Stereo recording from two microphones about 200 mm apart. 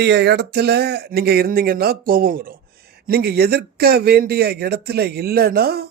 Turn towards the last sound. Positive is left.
turn(degrees=-50)  # may be behind; listen again after turning